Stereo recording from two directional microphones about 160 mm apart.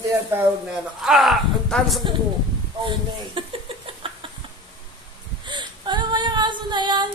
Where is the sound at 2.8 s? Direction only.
30° right (ahead or behind).